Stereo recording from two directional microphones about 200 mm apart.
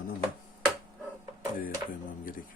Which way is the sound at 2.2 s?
45° left (ahead or behind).